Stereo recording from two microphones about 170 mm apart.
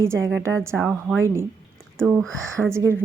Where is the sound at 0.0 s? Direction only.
15° right (ahead or behind).